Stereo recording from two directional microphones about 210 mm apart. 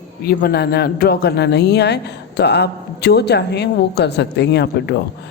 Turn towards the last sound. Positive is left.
turn(degrees=55)  # may be behind; listen again after turning